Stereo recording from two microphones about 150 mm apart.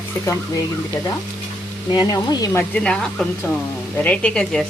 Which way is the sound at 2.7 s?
5° left (ahead or behind).